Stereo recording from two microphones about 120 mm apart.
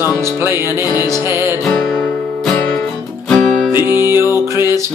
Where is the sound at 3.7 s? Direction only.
20° right (ahead or behind).